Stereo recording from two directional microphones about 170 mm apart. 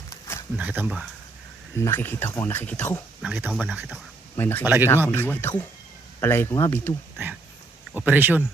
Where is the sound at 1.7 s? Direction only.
15° left (ahead or behind).